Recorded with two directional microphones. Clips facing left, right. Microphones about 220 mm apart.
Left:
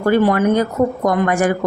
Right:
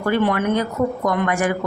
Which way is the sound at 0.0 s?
40° left (ahead or behind).